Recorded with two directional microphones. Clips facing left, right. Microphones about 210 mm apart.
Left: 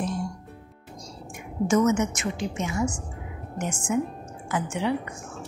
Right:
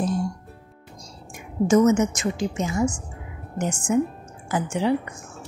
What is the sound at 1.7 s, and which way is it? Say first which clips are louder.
A woman's voice: right 4 dB; 35° right (ahead or behind).